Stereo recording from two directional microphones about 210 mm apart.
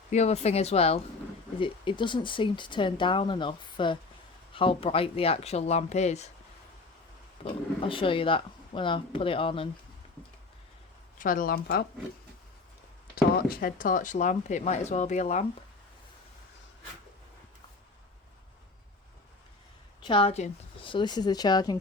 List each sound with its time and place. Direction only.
0.1 s speech: 30° left (ahead or behind)
7.4 s speech: 25° left (ahead or behind)
11.2 s speech: 40° left (ahead or behind)
13.3 s speech: 45° left (ahead or behind)
20.0 s speech: 25° left (ahead or behind)